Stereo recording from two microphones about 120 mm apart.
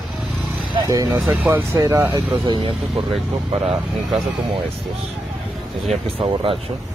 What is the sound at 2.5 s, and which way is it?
Speech, 40° right (ahead or behind).